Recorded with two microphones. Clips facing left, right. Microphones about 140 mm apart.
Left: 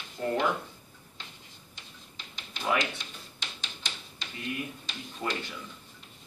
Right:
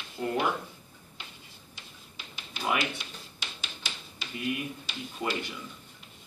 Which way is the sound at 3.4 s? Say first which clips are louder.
Even; 5° right (ahead or behind).